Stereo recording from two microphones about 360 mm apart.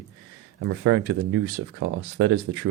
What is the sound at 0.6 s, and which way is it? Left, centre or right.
Speech, right.